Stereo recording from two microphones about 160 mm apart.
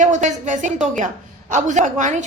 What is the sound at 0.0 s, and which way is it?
Speech, 50° right (ahead or behind).